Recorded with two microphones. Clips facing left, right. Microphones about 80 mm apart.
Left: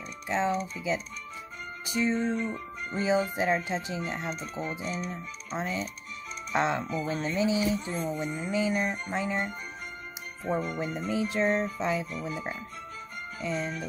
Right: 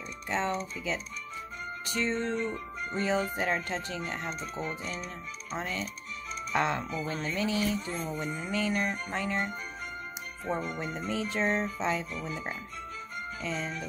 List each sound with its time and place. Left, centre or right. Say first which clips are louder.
0.3 s speech: left 3 dB; centre
10.6 s speech: left 3 dB; centre